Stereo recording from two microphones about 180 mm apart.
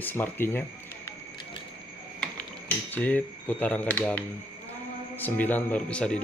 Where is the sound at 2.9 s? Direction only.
10° left (ahead or behind).